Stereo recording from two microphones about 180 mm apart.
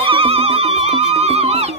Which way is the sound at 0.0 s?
30° right (ahead or behind).